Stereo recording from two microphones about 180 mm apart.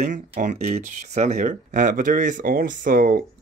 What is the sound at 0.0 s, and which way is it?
Speech, 45° right (ahead or behind).